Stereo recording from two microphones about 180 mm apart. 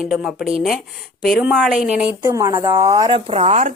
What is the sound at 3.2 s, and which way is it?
Speech, 30° right (ahead or behind).